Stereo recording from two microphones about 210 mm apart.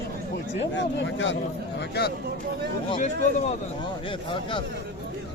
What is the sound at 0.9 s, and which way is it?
Speech, 60° left (ahead or behind).